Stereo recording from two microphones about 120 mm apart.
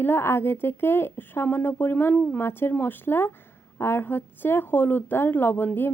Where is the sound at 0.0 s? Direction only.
20° left (ahead or behind).